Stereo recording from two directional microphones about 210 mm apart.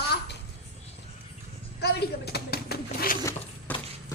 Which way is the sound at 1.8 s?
50° left (ahead or behind).